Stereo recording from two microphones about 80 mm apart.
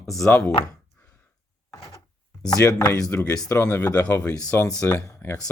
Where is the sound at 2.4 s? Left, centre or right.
Left.